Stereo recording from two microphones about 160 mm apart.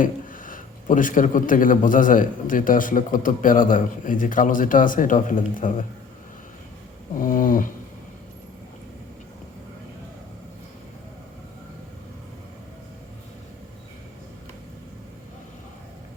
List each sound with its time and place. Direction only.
0.0 s a man's voice: 55° left (ahead or behind)
7.2 s a man's voice: 60° left (ahead or behind)